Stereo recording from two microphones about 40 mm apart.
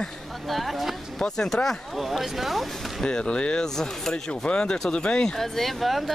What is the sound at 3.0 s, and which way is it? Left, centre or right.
Speech, left.